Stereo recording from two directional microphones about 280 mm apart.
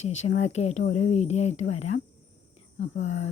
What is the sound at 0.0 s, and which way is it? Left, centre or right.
Speech, left.